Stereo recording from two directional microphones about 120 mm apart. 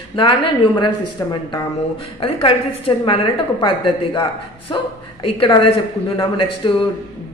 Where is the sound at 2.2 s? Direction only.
50° left (ahead or behind).